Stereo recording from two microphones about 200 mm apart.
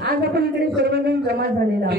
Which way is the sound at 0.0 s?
55° right (ahead or behind).